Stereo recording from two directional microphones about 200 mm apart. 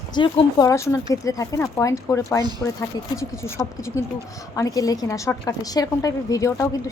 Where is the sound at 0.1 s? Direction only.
20° left (ahead or behind).